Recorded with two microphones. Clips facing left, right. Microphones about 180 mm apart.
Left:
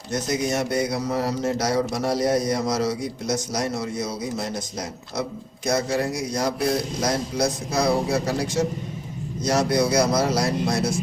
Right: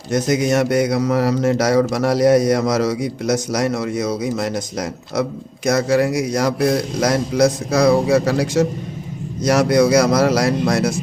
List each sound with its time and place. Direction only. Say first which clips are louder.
0.1 s speech: right 7 dB; 90° right